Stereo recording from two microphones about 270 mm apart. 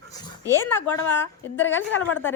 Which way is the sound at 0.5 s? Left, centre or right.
Centre.